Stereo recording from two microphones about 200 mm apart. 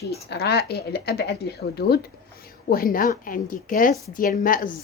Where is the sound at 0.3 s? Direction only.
55° left (ahead or behind).